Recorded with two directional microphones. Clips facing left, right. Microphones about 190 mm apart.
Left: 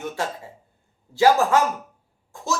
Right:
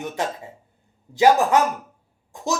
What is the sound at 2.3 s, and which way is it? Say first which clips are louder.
Cough: right 5 dB; 20° right (ahead or behind).